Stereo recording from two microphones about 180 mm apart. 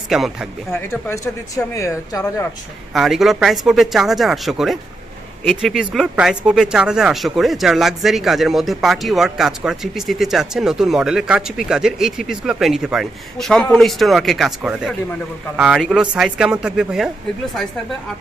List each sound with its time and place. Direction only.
0.1 s speech: centre (ahead or behind)
1.0 s speech: 15° left (ahead or behind)
2.9 s speech: centre (ahead or behind)